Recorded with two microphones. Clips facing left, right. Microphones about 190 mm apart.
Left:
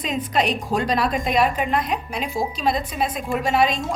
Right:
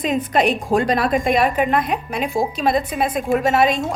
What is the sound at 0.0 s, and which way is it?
A woman's voice, 55° right (ahead or behind).